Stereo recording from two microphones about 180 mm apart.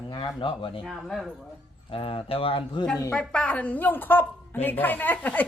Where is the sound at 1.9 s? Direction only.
30° left (ahead or behind).